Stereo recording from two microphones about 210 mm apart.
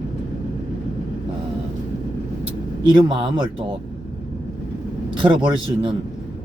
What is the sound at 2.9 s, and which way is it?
Speech, 25° right (ahead or behind).